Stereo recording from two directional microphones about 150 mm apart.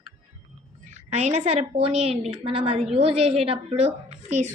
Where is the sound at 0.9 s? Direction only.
45° right (ahead or behind).